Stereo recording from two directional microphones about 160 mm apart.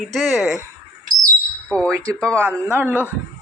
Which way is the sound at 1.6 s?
5° left (ahead or behind).